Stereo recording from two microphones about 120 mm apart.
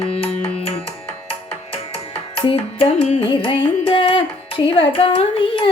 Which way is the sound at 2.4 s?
50° left (ahead or behind).